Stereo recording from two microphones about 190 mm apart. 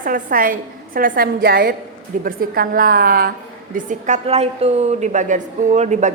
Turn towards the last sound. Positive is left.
turn(degrees=-40)  # may be behind; listen again after turning